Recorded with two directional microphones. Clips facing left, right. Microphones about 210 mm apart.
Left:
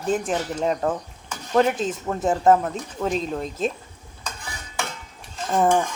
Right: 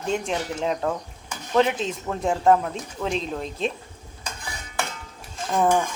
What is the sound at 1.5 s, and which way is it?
A woman's voice, 5° left (ahead or behind).